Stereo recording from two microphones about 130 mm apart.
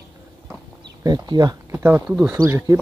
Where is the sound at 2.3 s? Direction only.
25° right (ahead or behind).